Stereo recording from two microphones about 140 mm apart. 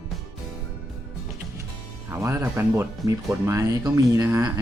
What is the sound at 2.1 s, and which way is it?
Speech, 20° right (ahead or behind).